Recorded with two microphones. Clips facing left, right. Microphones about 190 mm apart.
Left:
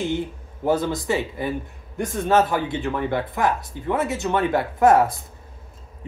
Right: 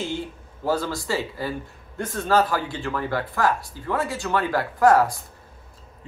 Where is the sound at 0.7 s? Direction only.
20° left (ahead or behind).